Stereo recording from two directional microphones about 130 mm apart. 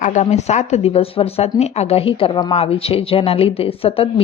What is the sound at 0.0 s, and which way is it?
A woman's voice, 70° left (ahead or behind).